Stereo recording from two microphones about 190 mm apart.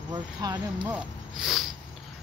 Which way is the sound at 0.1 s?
20° right (ahead or behind).